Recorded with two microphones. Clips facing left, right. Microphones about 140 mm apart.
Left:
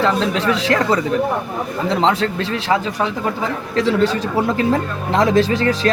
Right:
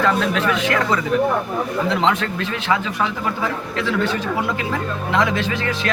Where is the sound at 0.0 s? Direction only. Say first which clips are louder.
Left 1 dB; 30° left (ahead or behind).